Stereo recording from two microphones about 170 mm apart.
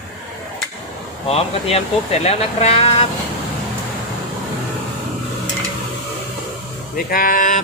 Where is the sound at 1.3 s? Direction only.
35° left (ahead or behind).